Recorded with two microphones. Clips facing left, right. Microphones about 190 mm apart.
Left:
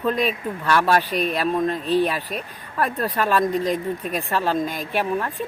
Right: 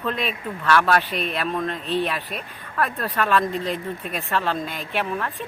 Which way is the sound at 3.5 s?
40° left (ahead or behind).